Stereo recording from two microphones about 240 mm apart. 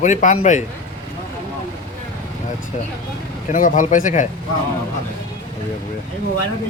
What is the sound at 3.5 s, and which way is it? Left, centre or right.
Speech, left.